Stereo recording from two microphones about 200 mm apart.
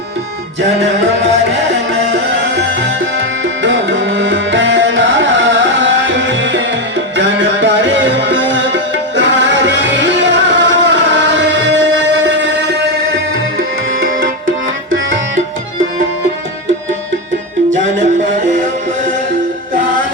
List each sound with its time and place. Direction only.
0.8 s music: 65° right (ahead or behind)
2.6 s tabla: 65° right (ahead or behind)
7.2 s music: 65° right (ahead or behind)